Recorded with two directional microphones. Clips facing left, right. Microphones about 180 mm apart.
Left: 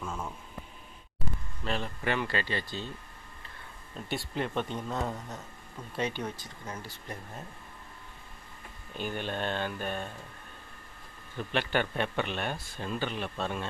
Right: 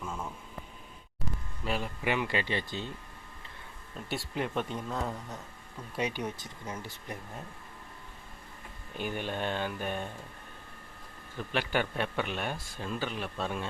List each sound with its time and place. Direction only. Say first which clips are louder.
0.0 s a sound: left 1 dB; centre (ahead or behind)
1.6 s speech: even; 10° right (ahead or behind)
3.9 s a man's voice: left 1 dB; 5° right (ahead or behind)
6.0 s speech: even; 15° right (ahead or behind)
9.0 s speech: even; 10° right (ahead or behind)
11.5 s a man's voice: left 1 dB; 5° right (ahead or behind)